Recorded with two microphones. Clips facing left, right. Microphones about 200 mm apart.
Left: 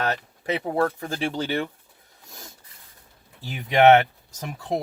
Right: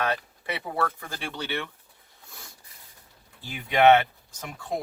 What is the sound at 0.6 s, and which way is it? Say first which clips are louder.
Speech: left 5 dB; 40° left (ahead or behind).